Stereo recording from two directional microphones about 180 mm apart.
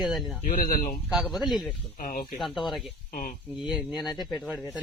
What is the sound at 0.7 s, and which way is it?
Speech, 50° left (ahead or behind).